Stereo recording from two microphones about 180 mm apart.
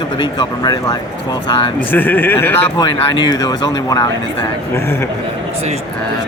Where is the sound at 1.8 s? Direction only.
10° left (ahead or behind).